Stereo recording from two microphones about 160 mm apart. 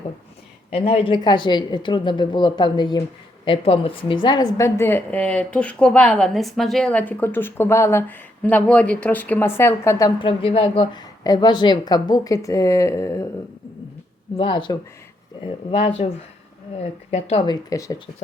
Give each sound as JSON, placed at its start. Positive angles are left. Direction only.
{"t": 0.7, "sound": "a woman's voice", "side_deg": 35}
{"t": 10.2, "sound": "a woman's voice", "side_deg": 35}
{"t": 14.3, "sound": "speech", "side_deg": 30}
{"t": 17.5, "sound": "a woman's voice", "side_deg": 20}